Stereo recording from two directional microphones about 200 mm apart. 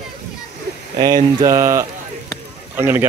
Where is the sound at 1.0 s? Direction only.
20° right (ahead or behind).